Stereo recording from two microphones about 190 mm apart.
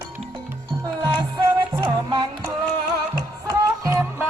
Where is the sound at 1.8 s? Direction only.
25° right (ahead or behind).